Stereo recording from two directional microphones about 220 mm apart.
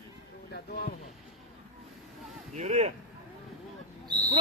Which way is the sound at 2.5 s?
30° right (ahead or behind).